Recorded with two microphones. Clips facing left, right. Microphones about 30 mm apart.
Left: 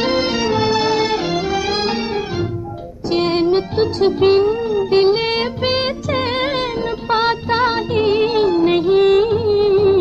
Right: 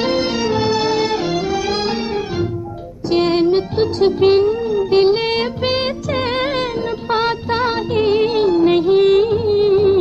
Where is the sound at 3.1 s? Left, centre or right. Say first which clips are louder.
Right 1 dB; centre.